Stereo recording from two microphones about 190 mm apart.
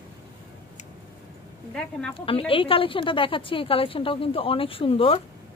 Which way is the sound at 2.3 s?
30° left (ahead or behind).